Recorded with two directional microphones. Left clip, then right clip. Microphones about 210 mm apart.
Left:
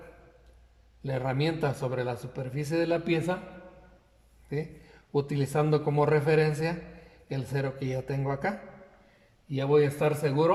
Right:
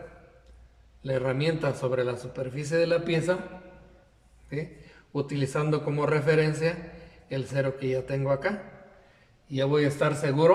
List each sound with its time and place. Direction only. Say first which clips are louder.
1.0 s a man's voice: right 3 dB; 20° left (ahead or behind)
4.5 s a man's voice: even; 20° left (ahead or behind)